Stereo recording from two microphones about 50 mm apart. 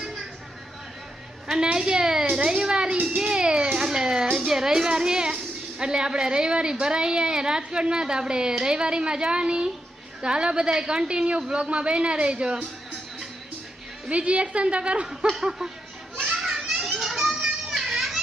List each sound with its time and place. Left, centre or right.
0.0 s vehicle: centre
1.5 s a woman's voice: centre
2.3 s a sound: centre
5.8 s a woman's voice: centre
14.1 s a woman's voice: right
15.4 s a woman's voice: centre
16.2 s children playing: centre